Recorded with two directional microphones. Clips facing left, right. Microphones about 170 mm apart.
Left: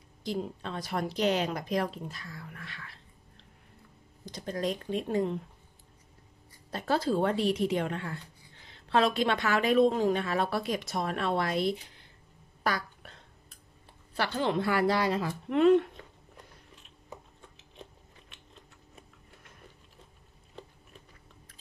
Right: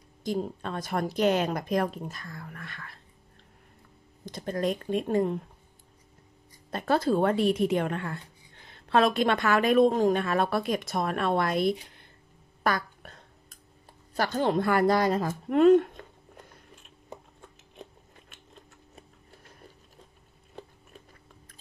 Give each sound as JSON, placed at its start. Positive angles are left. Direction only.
{"t": 0.2, "sound": "a woman's voice", "side_deg": -45}
{"t": 4.3, "sound": "a woman's voice", "side_deg": -55}
{"t": 6.7, "sound": "a woman's voice", "side_deg": -55}
{"t": 12.6, "sound": "a sound", "side_deg": -50}
{"t": 14.1, "sound": "a woman's voice", "side_deg": -45}